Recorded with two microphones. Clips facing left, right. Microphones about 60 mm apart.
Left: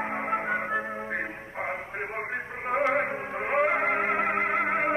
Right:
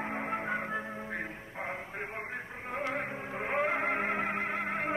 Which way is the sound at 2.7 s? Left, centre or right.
Left.